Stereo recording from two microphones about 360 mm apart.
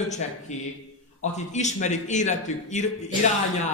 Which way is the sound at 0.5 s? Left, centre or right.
Centre.